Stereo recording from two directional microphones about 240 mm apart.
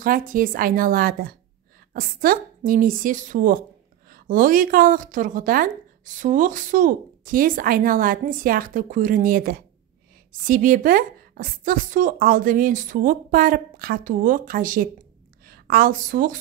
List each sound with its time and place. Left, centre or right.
0.0 s a woman's voice: right